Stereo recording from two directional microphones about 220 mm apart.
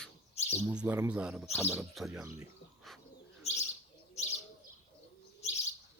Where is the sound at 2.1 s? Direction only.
15° right (ahead or behind).